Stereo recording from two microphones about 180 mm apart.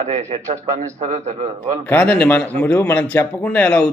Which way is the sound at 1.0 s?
45° right (ahead or behind).